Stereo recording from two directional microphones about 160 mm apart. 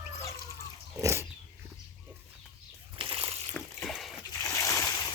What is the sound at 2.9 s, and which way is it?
Slosh, 35° right (ahead or behind).